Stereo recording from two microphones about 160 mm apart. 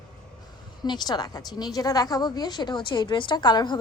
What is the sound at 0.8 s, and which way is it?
A woman's voice, 25° left (ahead or behind).